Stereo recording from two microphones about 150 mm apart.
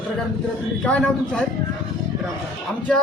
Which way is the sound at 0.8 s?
5° left (ahead or behind).